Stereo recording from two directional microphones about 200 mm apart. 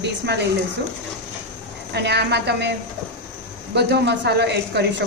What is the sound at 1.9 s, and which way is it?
Speech, 55° right (ahead or behind).